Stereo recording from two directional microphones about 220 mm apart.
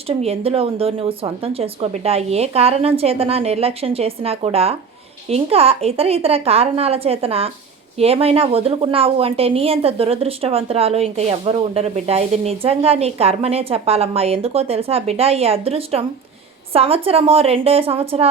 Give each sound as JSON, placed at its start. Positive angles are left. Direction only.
{"t": 0.1, "sound": "a woman's voice", "side_deg": -30}